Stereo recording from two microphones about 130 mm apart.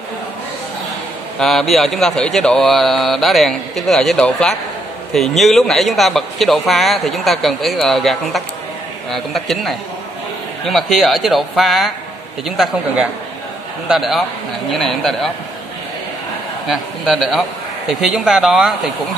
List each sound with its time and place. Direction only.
1.4 s speech: centre (ahead or behind)
13.8 s speech: centre (ahead or behind)
16.6 s speech: 5° right (ahead or behind)